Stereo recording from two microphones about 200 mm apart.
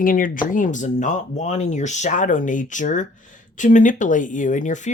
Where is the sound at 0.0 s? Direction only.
45° left (ahead or behind).